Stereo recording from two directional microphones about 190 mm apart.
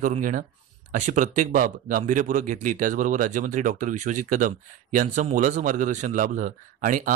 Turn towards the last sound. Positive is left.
turn(degrees=-45)  # may be behind; listen again after turning